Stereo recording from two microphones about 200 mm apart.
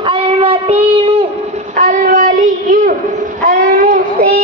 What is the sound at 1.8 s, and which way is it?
Child singing, 40° right (ahead or behind).